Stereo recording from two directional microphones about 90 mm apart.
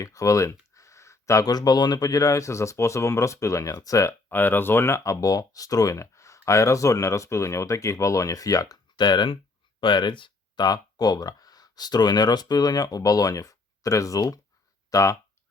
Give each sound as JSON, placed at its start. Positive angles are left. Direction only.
{"t": 0.0, "sound": "speech", "side_deg": 40}
{"t": 4.3, "sound": "speech", "side_deg": 25}
{"t": 10.7, "sound": "speech", "side_deg": 45}